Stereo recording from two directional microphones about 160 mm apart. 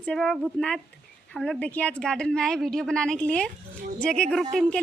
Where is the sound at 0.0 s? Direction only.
5° left (ahead or behind).